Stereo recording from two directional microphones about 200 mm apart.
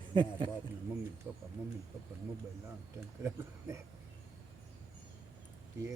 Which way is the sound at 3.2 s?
15° right (ahead or behind).